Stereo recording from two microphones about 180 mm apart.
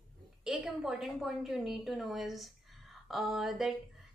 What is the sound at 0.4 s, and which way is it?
A woman's voice, 5° right (ahead or behind).